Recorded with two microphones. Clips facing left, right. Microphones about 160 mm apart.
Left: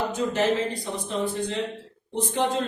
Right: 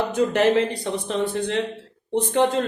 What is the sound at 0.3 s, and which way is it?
Speech, 70° right (ahead or behind).